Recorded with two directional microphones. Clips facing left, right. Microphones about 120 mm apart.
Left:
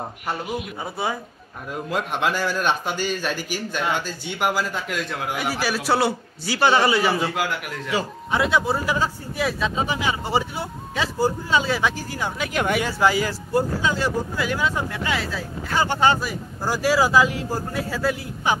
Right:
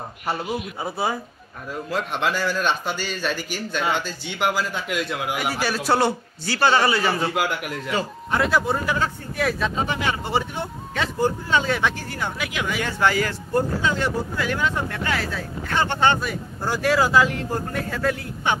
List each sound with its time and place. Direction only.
1.7 s speech: 10° left (ahead or behind)
4.8 s speech: 5° right (ahead or behind)
5.5 s speech: 5° left (ahead or behind)
7.9 s speech: centre (ahead or behind)
12.5 s speech: 55° left (ahead or behind)
12.8 s speech: 10° left (ahead or behind)